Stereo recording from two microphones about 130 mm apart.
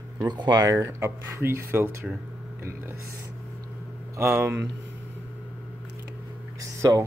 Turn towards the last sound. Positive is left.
turn(degrees=-25)  # may be behind; listen again after turning